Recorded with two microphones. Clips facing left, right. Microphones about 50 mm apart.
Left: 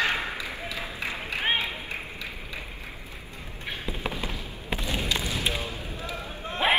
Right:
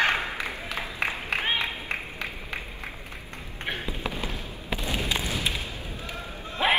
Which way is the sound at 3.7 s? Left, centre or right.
Right.